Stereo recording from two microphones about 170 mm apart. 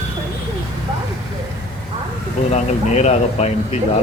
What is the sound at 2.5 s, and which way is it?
Speech, 40° left (ahead or behind).